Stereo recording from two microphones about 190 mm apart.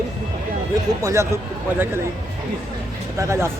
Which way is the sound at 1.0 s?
15° right (ahead or behind).